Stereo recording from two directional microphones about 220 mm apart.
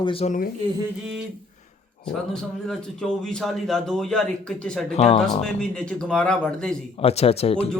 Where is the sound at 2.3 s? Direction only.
Centre (ahead or behind).